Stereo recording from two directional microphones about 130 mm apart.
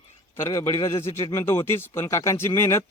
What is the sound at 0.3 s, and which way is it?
A man's voice, 20° left (ahead or behind).